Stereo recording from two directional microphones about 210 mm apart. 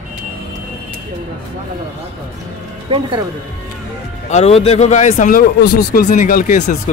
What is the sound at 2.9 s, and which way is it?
Speech, 25° right (ahead or behind).